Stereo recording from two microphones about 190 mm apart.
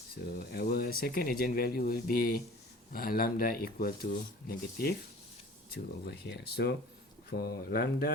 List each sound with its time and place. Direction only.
0.1 s speech: 55° left (ahead or behind)